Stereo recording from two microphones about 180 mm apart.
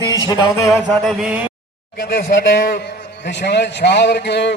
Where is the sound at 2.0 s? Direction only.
55° left (ahead or behind).